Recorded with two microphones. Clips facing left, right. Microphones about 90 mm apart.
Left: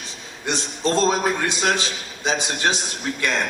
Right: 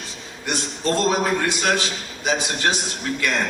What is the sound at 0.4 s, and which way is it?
A man's voice, 20° left (ahead or behind).